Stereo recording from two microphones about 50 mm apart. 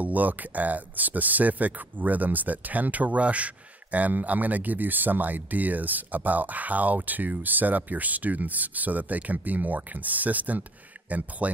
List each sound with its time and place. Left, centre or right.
0.0 s speech: right